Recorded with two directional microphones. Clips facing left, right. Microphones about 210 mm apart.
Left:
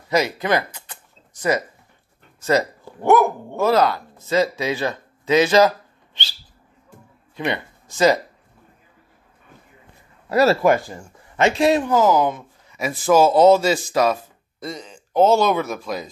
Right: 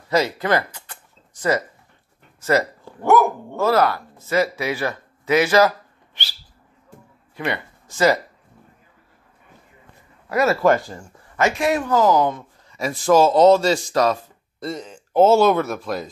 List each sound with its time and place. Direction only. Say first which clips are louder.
0.1 s speech: even; 15° left (ahead or behind)
2.4 s speech: even; 15° left (ahead or behind)
7.3 s speech: left 1 dB; 20° left (ahead or behind)
10.3 s speech: left 3 dB; 30° left (ahead or behind)
10.6 s speech: even; 10° left (ahead or behind)
11.3 s speech: left 3 dB; 30° left (ahead or behind)
11.8 s speech: even; 15° left (ahead or behind)
12.8 s speech: even; 5° left (ahead or behind)